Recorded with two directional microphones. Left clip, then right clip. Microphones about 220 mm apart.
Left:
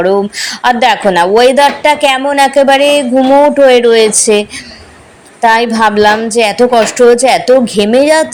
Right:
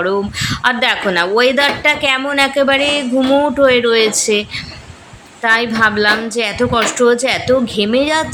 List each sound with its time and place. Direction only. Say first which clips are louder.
0.0 s a woman's voice: left 6 dB; 20° left (ahead or behind)